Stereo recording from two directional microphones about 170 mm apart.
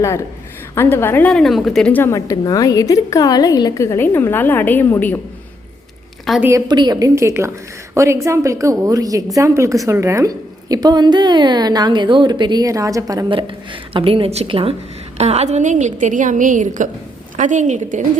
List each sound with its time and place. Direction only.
0.8 s a woman's voice: 15° left (ahead or behind)
6.3 s a woman's voice: centre (ahead or behind)
6.7 s a woman's voice: 25° right (ahead or behind)
13.9 s a woman's voice: 30° right (ahead or behind)